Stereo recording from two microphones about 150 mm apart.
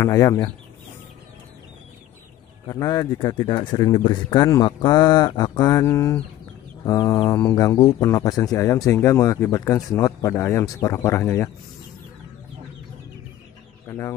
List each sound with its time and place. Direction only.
0.0 s speech: 20° left (ahead or behind)
2.6 s speech: 25° left (ahead or behind)
13.8 s speech: 20° left (ahead or behind)